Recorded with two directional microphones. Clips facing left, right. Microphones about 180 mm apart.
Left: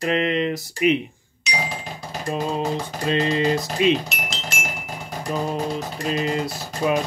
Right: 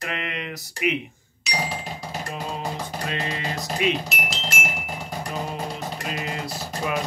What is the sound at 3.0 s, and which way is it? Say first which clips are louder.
Mantra: left 11 dB; 30° left (ahead or behind).